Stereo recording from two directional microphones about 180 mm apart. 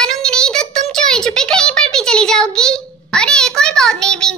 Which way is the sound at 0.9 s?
5° left (ahead or behind).